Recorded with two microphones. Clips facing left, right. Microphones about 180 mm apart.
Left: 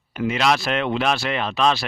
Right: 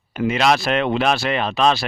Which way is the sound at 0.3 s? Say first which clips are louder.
Right 3 dB; 60° right (ahead or behind).